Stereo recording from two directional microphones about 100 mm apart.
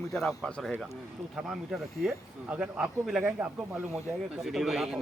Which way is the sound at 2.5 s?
15° right (ahead or behind).